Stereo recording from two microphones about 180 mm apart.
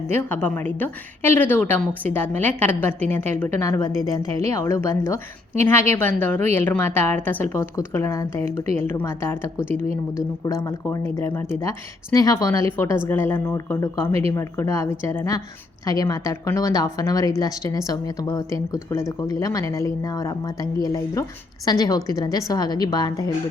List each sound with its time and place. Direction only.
0.1 s a woman's voice: 10° left (ahead or behind)